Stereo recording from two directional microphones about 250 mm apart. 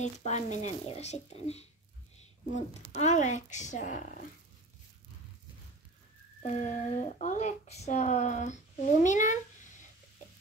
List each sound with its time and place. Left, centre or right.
0.0 s speech: left
6.4 s speech: left